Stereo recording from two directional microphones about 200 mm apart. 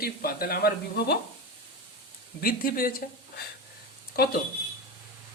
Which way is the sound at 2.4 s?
45° left (ahead or behind).